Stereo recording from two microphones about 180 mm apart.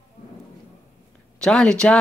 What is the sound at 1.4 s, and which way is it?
Speech, 5° left (ahead or behind).